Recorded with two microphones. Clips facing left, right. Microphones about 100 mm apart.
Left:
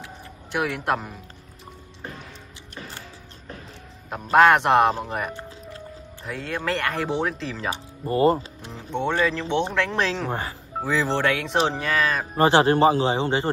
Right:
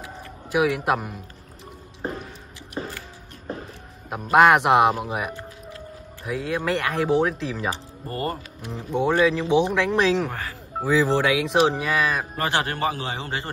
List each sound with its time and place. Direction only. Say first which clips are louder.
0.5 s speech: right 3 dB; 5° right (ahead or behind)
2.0 s music: right 8 dB; 35° right (ahead or behind)
4.1 s speech: even; 5° right (ahead or behind)
7.7 s speech: left 7 dB; 20° left (ahead or behind)
8.9 s speech: right 3 dB; 5° right (ahead or behind)
12.4 s a man's voice: left 12 dB; 25° left (ahead or behind)